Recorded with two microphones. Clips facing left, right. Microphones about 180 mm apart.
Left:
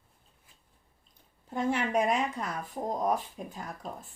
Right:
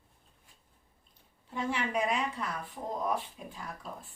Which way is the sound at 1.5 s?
45° left (ahead or behind).